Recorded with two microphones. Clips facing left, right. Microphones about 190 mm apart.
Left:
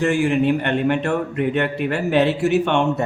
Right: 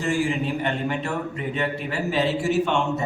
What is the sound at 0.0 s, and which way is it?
A man's voice, 65° left (ahead or behind).